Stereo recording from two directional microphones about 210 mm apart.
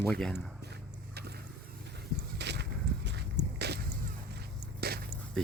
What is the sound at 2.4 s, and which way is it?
Walk, 55° right (ahead or behind).